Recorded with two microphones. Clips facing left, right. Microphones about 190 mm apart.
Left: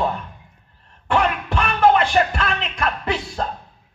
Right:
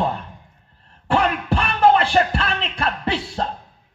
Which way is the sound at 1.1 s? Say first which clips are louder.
Right 1 dB; 35° right (ahead or behind).